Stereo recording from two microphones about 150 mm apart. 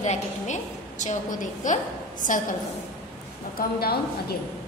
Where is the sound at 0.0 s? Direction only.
50° left (ahead or behind).